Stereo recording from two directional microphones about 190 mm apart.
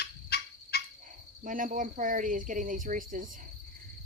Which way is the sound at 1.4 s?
45° right (ahead or behind).